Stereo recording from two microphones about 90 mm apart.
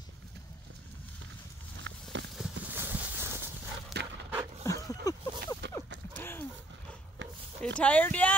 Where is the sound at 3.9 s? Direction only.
Centre (ahead or behind).